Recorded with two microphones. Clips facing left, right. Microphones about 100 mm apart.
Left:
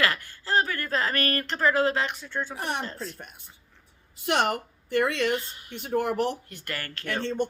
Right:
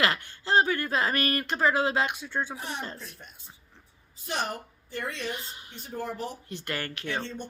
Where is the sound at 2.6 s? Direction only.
65° left (ahead or behind).